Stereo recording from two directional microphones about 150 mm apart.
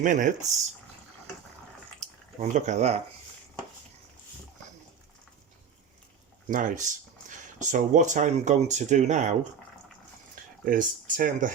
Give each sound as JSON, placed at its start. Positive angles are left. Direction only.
{"t": 0.0, "sound": "speech", "side_deg": -60}
{"t": 2.4, "sound": "speech", "side_deg": -50}
{"t": 6.5, "sound": "speech", "side_deg": -60}
{"t": 10.7, "sound": "speech", "side_deg": -65}